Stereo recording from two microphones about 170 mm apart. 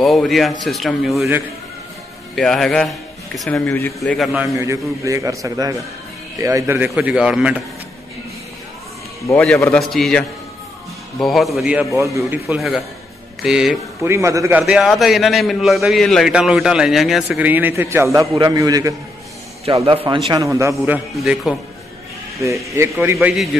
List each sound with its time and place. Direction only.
0.0 s a man's voice: centre (ahead or behind)
2.3 s speech: centre (ahead or behind)
3.6 s a man's voice: 15° left (ahead or behind)
4.0 s a man's voice: centre (ahead or behind)
4.6 s a man's voice: 20° right (ahead or behind)
9.3 s a man's voice: 5° left (ahead or behind)
12.0 s a man's voice: 15° right (ahead or behind)
12.4 s a man's voice: centre (ahead or behind)
14.0 s a man's voice: 15° right (ahead or behind)
14.7 s a man's voice: centre (ahead or behind); by 18.9 s 20° right (ahead or behind)
19.6 s a man's voice: 35° right (ahead or behind)
20.2 s a man's voice: 20° right (ahead or behind)
22.8 s a man's voice: 15° right (ahead or behind)
23.1 s a man's voice: centre (ahead or behind)